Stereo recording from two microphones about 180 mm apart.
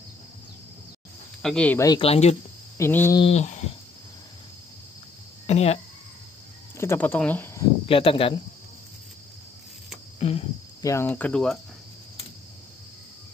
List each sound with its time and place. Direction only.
1.4 s cricket: 5° left (ahead or behind)
1.9 s speech: 30° left (ahead or behind)
2.8 s cricket: 15° left (ahead or behind)
3.2 s speech: 35° left (ahead or behind)
5.5 s speech: 35° left (ahead or behind)
6.8 s speech: 10° left (ahead or behind)
7.8 s speech: 30° left (ahead or behind)
10.1 s a sound: 35° left (ahead or behind)
10.8 s cricket: 15° left (ahead or behind)